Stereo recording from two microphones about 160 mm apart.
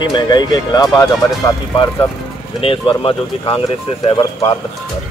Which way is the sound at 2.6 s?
35° left (ahead or behind).